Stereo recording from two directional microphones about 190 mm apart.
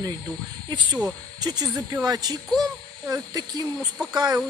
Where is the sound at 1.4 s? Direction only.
20° right (ahead or behind).